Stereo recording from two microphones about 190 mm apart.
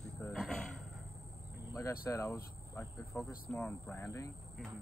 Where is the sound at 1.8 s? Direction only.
15° left (ahead or behind).